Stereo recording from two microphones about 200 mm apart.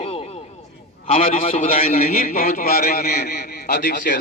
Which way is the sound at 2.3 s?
45° left (ahead or behind).